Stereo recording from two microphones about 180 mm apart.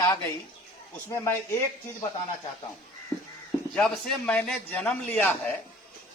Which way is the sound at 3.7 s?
5° left (ahead or behind).